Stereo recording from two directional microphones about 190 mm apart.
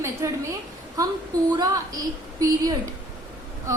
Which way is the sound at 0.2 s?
15° right (ahead or behind).